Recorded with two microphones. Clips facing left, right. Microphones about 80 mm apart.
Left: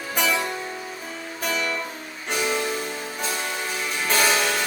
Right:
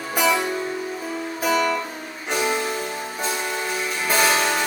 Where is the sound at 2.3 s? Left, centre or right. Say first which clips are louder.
Right 2 dB; centre.